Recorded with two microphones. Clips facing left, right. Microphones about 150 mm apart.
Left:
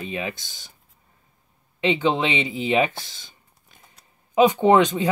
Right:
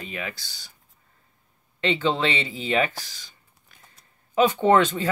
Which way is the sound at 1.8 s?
15° left (ahead or behind).